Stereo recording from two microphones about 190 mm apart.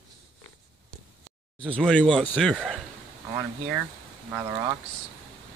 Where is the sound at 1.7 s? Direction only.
5° left (ahead or behind).